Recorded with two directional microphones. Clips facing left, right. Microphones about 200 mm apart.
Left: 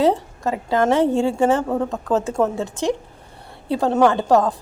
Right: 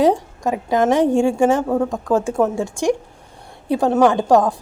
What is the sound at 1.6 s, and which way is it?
A woman's voice, centre (ahead or behind).